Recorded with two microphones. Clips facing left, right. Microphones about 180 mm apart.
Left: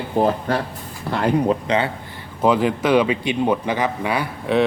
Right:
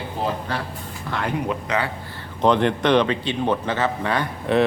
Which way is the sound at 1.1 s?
35° left (ahead or behind).